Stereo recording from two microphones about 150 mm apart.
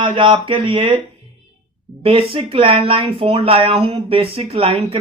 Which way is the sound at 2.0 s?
40° right (ahead or behind).